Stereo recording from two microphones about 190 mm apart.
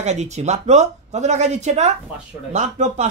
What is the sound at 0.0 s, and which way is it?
Speech, 35° right (ahead or behind).